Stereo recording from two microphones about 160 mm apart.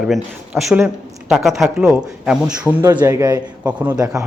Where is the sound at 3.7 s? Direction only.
5° right (ahead or behind).